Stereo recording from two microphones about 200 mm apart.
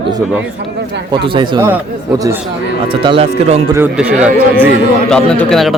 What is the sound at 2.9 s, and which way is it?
Speech, 25° right (ahead or behind).